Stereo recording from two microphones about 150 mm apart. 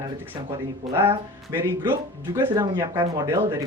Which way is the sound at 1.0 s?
15° right (ahead or behind).